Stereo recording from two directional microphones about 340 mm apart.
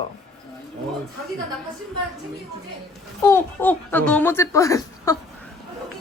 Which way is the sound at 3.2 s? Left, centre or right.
Centre.